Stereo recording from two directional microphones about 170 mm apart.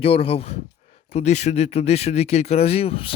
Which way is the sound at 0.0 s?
35° left (ahead or behind).